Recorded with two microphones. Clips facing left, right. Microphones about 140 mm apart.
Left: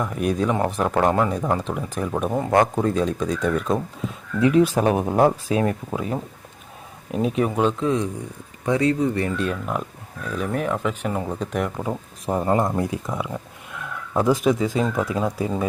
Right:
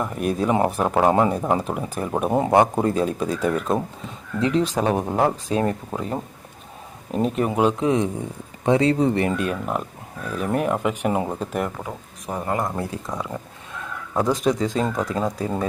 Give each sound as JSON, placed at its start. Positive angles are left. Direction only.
{"t": 0.0, "sound": "speech", "side_deg": 0}
{"t": 4.4, "sound": "speech", "side_deg": 15}
{"t": 9.4, "sound": "speech", "side_deg": -5}
{"t": 12.2, "sound": "speech", "side_deg": 30}